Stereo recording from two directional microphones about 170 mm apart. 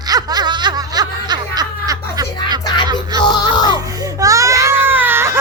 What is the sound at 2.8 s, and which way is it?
Music, 25° right (ahead or behind).